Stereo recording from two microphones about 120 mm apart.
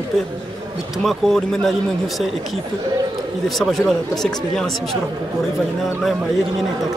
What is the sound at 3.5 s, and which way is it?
Speech, centre (ahead or behind).